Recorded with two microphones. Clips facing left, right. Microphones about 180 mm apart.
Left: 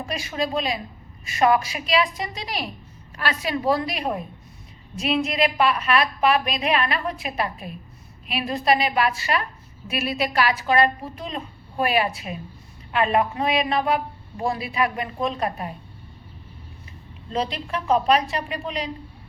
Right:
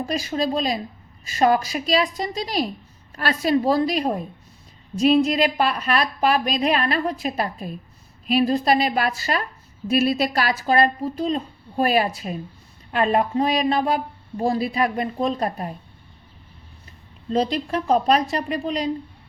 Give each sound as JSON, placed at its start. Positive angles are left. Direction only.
{"t": 0.0, "sound": "a woman's voice", "side_deg": -35}
{"t": 17.3, "sound": "a woman's voice", "side_deg": -40}